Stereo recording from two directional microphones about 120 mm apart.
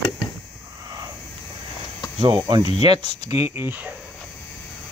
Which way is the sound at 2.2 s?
40° right (ahead or behind).